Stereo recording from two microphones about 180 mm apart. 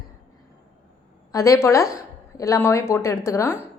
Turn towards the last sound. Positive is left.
turn(degrees=15)  # may be behind; listen again after turning